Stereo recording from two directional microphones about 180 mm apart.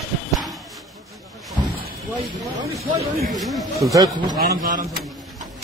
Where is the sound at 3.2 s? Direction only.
Centre (ahead or behind).